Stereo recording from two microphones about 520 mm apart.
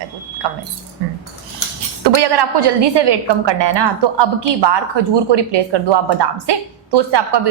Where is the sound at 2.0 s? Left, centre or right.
Right.